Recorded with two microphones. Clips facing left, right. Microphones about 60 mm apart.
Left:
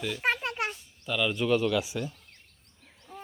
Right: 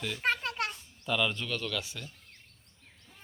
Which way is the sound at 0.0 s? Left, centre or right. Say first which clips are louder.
Left 2 dB; centre.